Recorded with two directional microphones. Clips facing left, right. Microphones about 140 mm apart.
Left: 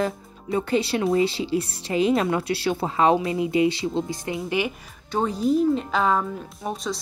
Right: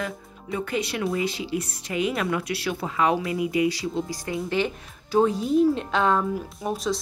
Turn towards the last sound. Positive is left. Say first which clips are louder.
# right 2 dB
turn(degrees=0)  # may be behind; listen again after turning